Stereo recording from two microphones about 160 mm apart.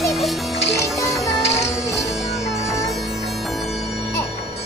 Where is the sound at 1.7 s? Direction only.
20° left (ahead or behind).